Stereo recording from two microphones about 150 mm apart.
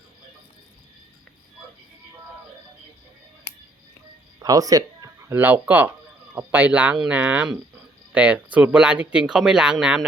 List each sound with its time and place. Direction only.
4.4 s speech: 25° right (ahead or behind); by 10.1 s 5° right (ahead or behind)